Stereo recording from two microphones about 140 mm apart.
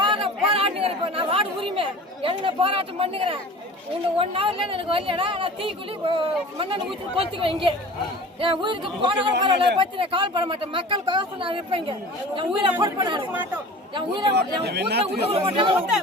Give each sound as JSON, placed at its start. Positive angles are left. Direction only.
{"t": 0.0, "sound": "chatter", "side_deg": -35}
{"t": 4.2, "sound": "a man's voice", "side_deg": -40}
{"t": 15.0, "sound": "a man's voice", "side_deg": -45}